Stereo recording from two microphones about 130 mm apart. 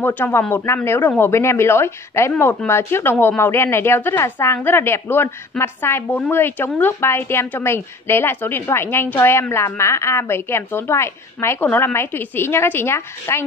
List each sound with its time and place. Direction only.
0.0 s a woman's voice: 15° left (ahead or behind)